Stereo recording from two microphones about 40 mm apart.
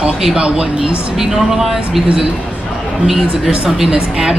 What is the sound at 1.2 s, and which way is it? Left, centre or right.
Speech, centre.